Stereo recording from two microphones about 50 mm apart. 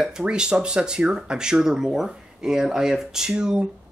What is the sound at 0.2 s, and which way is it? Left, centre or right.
Speech, centre.